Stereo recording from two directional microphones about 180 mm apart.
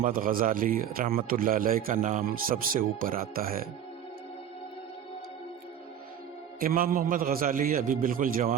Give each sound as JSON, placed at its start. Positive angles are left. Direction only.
{"t": 0.0, "sound": "a man's voice", "side_deg": -50}
{"t": 6.6, "sound": "a man's voice", "side_deg": -50}